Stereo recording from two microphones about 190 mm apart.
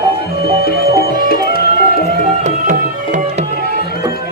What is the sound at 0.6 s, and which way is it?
Music, 55° left (ahead or behind).